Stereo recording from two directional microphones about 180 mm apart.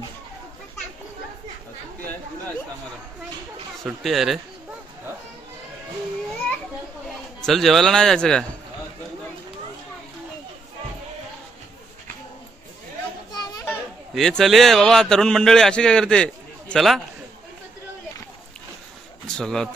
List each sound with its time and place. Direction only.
4.0 s a man's voice: centre (ahead or behind)
7.4 s a man's voice: centre (ahead or behind)
13.3 s children playing: 20° left (ahead or behind)
14.1 s a man's voice: centre (ahead or behind)
19.2 s speech: 5° left (ahead or behind)